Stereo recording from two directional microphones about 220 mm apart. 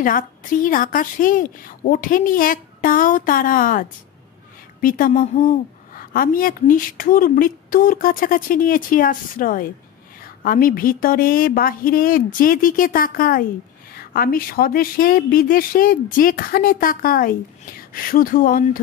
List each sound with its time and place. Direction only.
0.0 s a woman's voice: 40° left (ahead or behind)
4.8 s a woman's voice: 40° left (ahead or behind)